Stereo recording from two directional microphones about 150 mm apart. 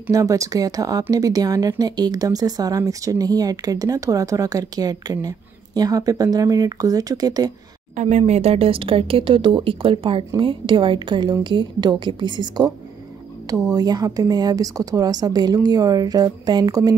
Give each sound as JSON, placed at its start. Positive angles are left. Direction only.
{"t": 0.1, "sound": "speech", "side_deg": -20}
{"t": 7.9, "sound": "speech", "side_deg": -50}